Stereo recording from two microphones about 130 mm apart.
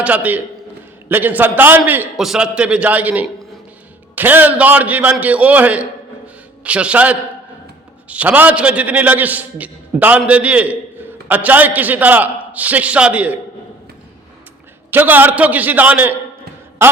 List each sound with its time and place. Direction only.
0.0 s a man's voice: 10° right (ahead or behind)
2.1 s a man's voice: 5° right (ahead or behind)
14.8 s a man's voice: 15° right (ahead or behind)
16.8 s a sound: 20° right (ahead or behind)